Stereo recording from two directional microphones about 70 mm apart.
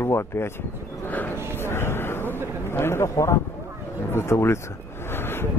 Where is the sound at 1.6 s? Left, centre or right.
Left.